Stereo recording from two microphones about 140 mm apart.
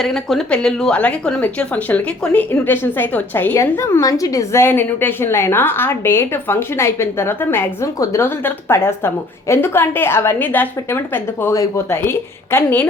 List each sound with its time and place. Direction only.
0.0 s a woman's voice: centre (ahead or behind)